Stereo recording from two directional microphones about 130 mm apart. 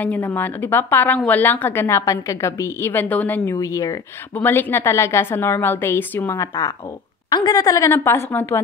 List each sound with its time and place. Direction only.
0.0 s a woman's voice: 15° left (ahead or behind)
3.6 s a woman's voice: 25° left (ahead or behind)
7.2 s a woman's voice: 35° left (ahead or behind); by 8.5 s 15° left (ahead or behind)